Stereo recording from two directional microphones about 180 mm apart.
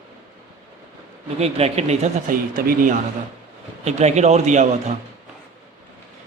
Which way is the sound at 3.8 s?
40° right (ahead or behind).